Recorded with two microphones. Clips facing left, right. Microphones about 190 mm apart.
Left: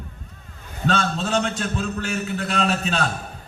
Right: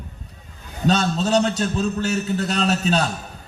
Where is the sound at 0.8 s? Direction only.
40° right (ahead or behind).